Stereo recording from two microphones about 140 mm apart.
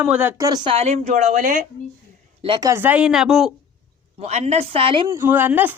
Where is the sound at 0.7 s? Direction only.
50° right (ahead or behind); by 1.6 s 65° right (ahead or behind).